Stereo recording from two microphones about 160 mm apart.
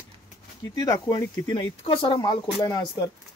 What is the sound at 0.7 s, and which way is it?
Speech, 25° left (ahead or behind).